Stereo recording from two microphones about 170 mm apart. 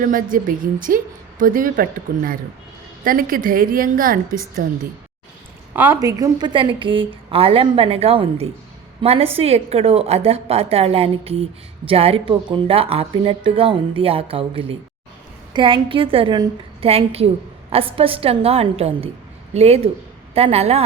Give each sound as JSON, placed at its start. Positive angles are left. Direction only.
{"t": 0.0, "sound": "a woman's voice", "side_deg": -55}
{"t": 5.7, "sound": "a woman's voice", "side_deg": -10}